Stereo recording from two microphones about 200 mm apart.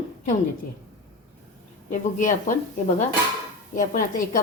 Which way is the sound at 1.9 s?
40° left (ahead or behind).